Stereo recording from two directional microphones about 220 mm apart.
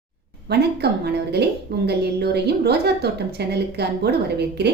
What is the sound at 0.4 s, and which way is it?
A woman's voice, 50° right (ahead or behind).